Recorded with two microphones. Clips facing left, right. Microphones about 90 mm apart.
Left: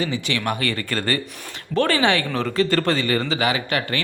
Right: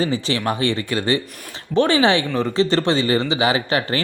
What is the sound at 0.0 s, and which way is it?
Speech, 30° right (ahead or behind).